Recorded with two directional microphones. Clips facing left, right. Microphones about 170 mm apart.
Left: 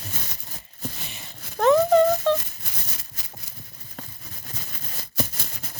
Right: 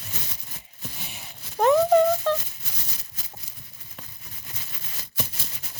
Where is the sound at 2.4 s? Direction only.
60° left (ahead or behind).